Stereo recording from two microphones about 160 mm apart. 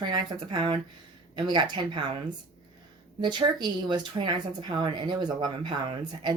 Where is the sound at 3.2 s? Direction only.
30° right (ahead or behind).